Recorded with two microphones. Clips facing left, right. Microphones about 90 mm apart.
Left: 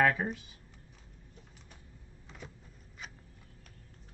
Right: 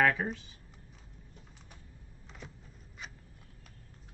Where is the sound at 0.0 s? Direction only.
5° left (ahead or behind).